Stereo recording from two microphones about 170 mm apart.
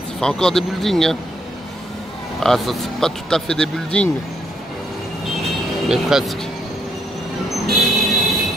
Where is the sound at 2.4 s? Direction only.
Centre (ahead or behind).